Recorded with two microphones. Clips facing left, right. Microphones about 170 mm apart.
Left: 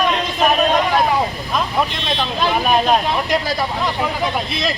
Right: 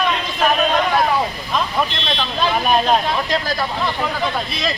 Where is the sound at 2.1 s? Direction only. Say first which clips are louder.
Left 1 dB; 10° left (ahead or behind).